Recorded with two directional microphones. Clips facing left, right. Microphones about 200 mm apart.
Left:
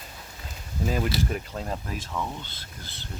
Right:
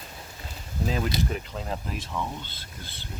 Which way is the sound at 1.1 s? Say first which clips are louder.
Even; 20° right (ahead or behind).